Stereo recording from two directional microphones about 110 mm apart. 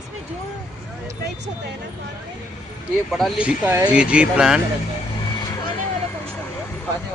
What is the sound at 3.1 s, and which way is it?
Speech, 5° right (ahead or behind).